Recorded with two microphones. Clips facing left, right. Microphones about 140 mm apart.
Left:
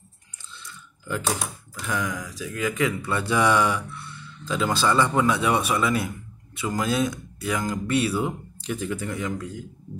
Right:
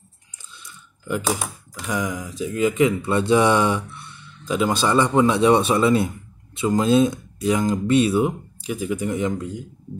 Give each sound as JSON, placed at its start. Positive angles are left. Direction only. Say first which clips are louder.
{"t": 0.7, "sound": "mechanisms", "louder": "right 4 dB", "side_deg": -15}
{"t": 1.9, "sound": "speech", "louder": "right 3 dB", "side_deg": -20}